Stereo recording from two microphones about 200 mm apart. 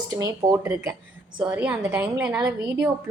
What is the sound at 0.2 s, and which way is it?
A woman's voice, 15° right (ahead or behind).